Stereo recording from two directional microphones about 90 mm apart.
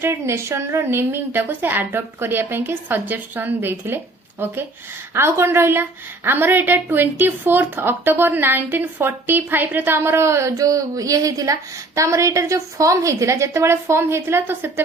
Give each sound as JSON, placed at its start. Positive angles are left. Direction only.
{"t": 0.0, "sound": "a woman's voice", "side_deg": -30}